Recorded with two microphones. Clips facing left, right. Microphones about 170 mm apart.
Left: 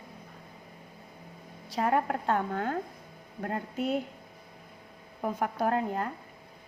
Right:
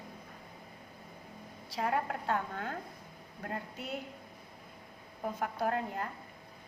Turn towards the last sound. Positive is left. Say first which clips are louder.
# left 5 dB
turn(degrees=55)  # may be behind; listen again after turning